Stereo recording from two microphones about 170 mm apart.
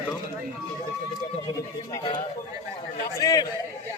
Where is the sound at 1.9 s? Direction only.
25° left (ahead or behind).